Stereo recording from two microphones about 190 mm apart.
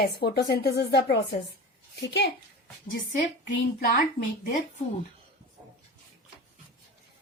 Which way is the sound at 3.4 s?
45° left (ahead or behind).